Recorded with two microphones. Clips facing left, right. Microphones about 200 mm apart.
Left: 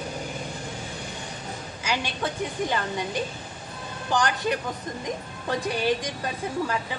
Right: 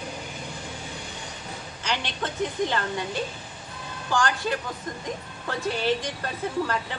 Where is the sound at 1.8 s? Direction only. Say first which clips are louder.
Left 1 dB; 10° left (ahead or behind).